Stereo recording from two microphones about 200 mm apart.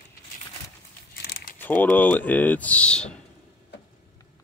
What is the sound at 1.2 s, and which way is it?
Crumpling, 50° left (ahead or behind).